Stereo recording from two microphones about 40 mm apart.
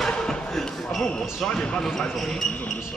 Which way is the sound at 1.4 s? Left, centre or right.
Left.